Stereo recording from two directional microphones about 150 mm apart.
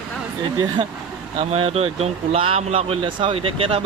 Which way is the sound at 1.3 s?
40° right (ahead or behind).